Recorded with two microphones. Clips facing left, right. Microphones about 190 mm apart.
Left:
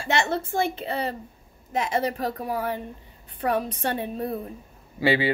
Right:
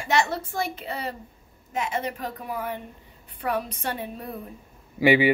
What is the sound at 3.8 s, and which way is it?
Speech, 30° left (ahead or behind).